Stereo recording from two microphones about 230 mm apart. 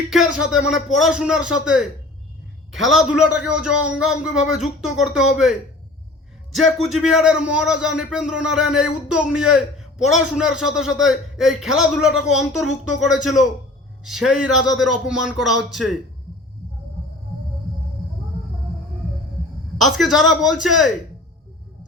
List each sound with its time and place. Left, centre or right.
0.1 s a man's voice: centre
13.1 s a man's voice: left
14.0 s a man's voice: centre
19.8 s a man's voice: centre